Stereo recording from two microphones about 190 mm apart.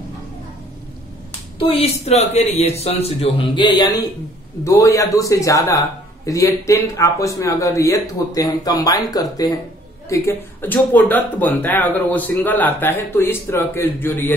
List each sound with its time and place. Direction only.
1.6 s a man's voice: 30° left (ahead or behind); by 14.3 s 10° left (ahead or behind)